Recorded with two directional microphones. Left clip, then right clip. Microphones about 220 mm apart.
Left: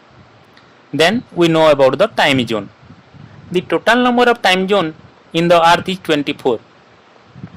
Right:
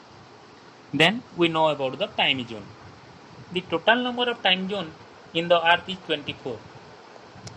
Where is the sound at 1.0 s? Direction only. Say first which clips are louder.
Left 8 dB; 15° left (ahead or behind).